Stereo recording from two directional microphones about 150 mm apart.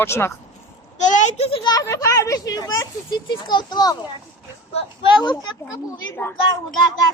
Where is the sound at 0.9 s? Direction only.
55° left (ahead or behind).